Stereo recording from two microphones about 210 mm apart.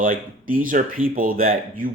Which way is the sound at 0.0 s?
40° right (ahead or behind).